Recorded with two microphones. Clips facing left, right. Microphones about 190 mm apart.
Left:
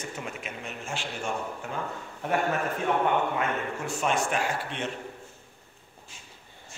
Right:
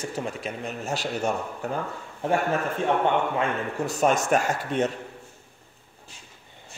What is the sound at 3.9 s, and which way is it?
Speech, 40° right (ahead or behind).